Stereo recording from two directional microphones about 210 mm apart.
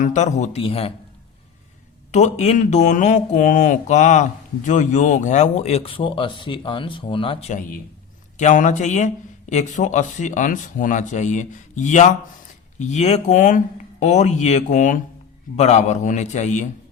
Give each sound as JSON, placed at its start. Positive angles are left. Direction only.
{"t": 0.0, "sound": "speech", "side_deg": 35}
{"t": 2.1, "sound": "speech", "side_deg": 35}